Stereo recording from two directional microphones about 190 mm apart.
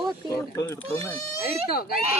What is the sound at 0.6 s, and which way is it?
Speech, 15° left (ahead or behind).